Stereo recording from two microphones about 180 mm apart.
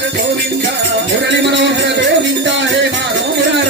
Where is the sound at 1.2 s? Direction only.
80° right.